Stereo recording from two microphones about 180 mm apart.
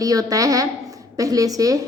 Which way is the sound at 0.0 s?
20° right (ahead or behind).